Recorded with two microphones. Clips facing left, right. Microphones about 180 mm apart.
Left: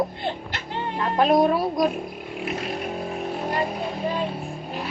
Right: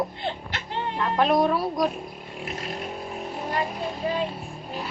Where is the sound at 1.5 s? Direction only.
10° left (ahead or behind).